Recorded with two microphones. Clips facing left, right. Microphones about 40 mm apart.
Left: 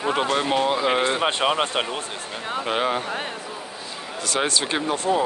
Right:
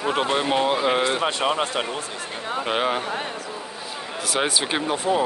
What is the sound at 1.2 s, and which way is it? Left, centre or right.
Speech, left.